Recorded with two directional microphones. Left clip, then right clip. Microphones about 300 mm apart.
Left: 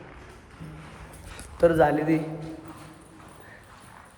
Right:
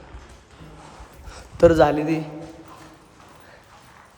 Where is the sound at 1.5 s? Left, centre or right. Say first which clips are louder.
Right 5 dB; right.